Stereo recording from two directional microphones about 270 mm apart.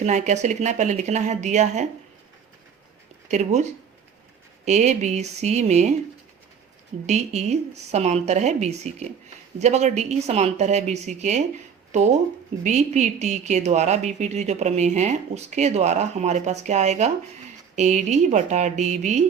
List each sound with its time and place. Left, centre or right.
0.0 s a woman's voice: right
3.2 s a woman's voice: right
7.1 s a woman's voice: right